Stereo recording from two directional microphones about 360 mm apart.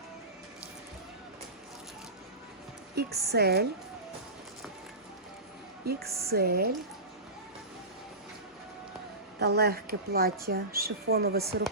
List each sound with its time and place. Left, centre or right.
2.9 s speech: right
5.8 s speech: right
9.6 s speech: right